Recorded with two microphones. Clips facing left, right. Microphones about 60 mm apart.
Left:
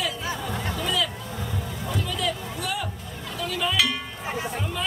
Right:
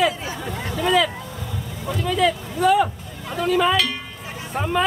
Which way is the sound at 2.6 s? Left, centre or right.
Right.